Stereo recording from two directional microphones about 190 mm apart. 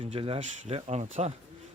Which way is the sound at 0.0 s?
30° right (ahead or behind).